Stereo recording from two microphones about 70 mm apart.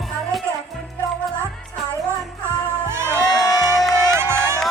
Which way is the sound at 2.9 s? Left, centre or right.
Right.